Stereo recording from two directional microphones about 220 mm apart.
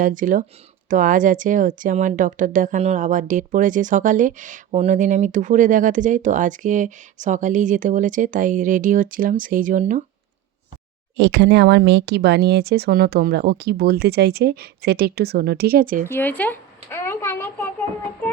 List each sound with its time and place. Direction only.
0.0 s speech: 35° right (ahead or behind)
11.2 s speech: 50° right (ahead or behind)
16.0 s a child's voice: 10° left (ahead or behind)